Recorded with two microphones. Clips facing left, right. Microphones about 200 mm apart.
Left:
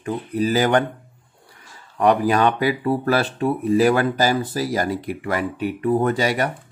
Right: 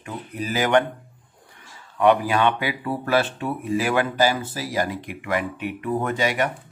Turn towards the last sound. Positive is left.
turn(degrees=35)  # may be behind; listen again after turning